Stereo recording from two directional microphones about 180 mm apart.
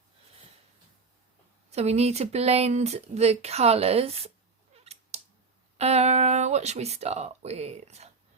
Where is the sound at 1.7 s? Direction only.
35° right (ahead or behind).